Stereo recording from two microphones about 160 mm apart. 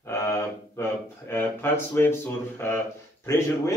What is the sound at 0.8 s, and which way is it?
A man's voice, 15° left (ahead or behind).